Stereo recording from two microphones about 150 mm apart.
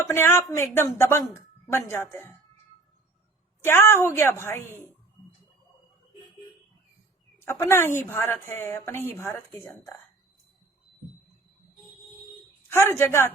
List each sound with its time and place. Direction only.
0.0 s a woman's voice: 15° left (ahead or behind)
3.6 s a woman's voice: 15° left (ahead or behind)
7.3 s a woman's voice: 15° left (ahead or behind)
12.9 s a woman's voice: 15° left (ahead or behind)